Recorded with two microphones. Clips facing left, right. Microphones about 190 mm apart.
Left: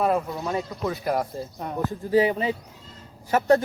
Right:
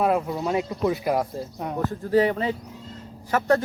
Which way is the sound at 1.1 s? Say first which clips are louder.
Right 1 dB; centre (ahead or behind).